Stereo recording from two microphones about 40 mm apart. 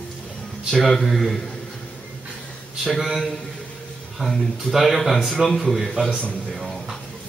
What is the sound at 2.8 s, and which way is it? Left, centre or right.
Speech, centre.